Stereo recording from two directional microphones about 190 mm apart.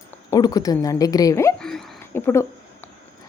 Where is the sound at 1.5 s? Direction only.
5° left (ahead or behind).